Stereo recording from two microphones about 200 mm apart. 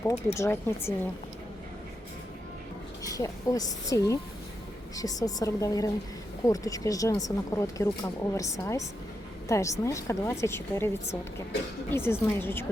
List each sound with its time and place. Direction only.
0.0 s speech: 15° left (ahead or behind)
3.0 s speech: 15° left (ahead or behind)